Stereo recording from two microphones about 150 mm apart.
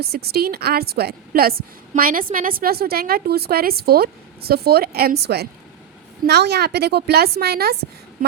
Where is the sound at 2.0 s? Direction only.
75° right (ahead or behind).